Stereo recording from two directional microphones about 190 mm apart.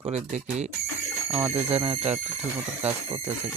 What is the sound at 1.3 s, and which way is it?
Speech, 15° right (ahead or behind).